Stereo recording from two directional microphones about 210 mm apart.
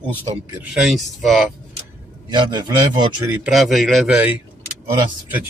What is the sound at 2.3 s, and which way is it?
A man's voice, 20° right (ahead or behind).